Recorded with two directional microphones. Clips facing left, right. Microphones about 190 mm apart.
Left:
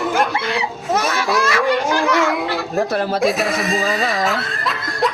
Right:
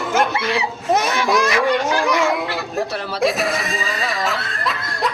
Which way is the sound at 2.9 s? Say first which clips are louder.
Left 7 dB; 50° left (ahead or behind).